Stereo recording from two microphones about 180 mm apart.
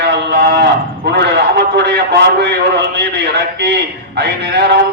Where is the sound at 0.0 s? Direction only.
65° right (ahead or behind).